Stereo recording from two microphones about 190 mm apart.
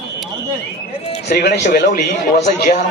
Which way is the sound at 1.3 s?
55° left (ahead or behind).